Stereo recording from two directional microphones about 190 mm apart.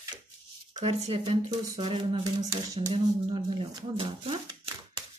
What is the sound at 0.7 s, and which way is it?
Speech, 35° right (ahead or behind).